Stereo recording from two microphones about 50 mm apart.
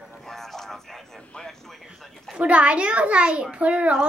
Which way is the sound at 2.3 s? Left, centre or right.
Right.